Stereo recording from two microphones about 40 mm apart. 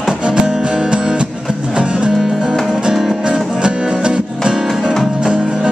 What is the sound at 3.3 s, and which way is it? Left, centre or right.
Music, right.